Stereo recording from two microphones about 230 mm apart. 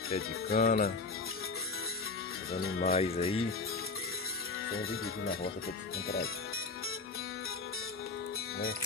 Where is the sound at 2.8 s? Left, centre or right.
Left.